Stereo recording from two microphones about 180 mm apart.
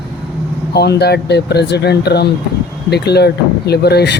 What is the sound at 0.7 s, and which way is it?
Speech, 65° left (ahead or behind).